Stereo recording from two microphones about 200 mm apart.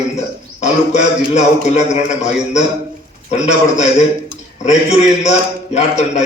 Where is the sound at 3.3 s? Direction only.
35° left (ahead or behind).